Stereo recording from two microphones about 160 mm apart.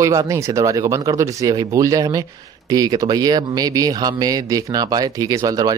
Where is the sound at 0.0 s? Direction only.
20° right (ahead or behind).